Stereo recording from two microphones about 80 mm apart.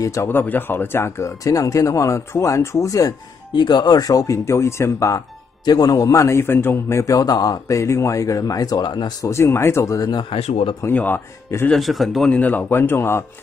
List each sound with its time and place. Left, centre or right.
0.0 s speech: left
0.3 s speech: left
3.5 s a man's voice: left
5.7 s a man's voice: left
9.2 s speech: left
9.9 s a man's voice: left
10.8 s speech: left
11.7 s speech: centre
12.3 s speech: centre